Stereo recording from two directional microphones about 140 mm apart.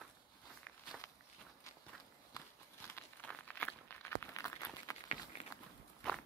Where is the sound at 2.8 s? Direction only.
15° left (ahead or behind).